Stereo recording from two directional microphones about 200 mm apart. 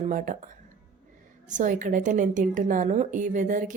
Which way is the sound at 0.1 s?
40° right (ahead or behind).